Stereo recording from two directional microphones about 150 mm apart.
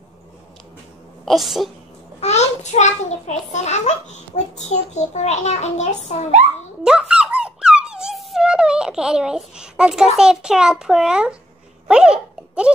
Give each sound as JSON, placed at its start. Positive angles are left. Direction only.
{"t": 1.2, "sound": "a child's voice", "side_deg": 0}
{"t": 2.1, "sound": "a child's voice", "side_deg": 50}
{"t": 6.8, "sound": "music", "side_deg": -5}
{"t": 10.1, "sound": "a child's voice", "side_deg": -5}